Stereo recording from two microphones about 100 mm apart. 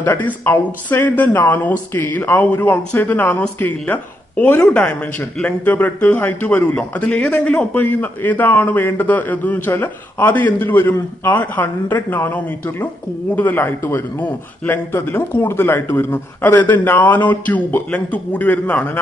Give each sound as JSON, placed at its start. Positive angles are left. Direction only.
{"t": 0.0, "sound": "a man's voice", "side_deg": 20}